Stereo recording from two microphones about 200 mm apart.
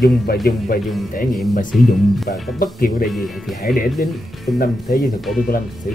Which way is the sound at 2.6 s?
45° left (ahead or behind).